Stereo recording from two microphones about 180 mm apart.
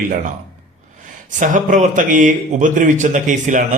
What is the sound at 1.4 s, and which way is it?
A man's voice, 45° right (ahead or behind).